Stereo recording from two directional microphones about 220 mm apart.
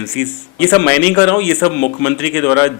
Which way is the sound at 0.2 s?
10° left (ahead or behind).